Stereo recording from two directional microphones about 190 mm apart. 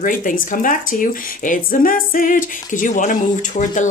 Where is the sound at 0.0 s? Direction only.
45° left (ahead or behind).